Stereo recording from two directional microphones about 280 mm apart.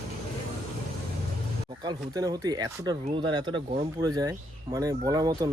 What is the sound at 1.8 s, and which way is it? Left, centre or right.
Speech, centre.